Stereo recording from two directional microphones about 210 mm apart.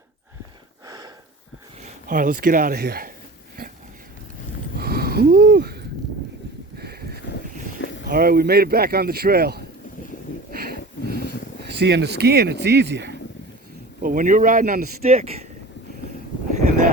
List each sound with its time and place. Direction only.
0.9 s a sound: 15° right (ahead or behind)
1.8 s speech: 40° right (ahead or behind)
4.8 s a sound: 45° right (ahead or behind)
8.0 s speech: 45° right (ahead or behind)
10.7 s wheeze: 45° right (ahead or behind)
11.8 s speech: 55° right (ahead or behind)
14.0 s speech: 40° right (ahead or behind)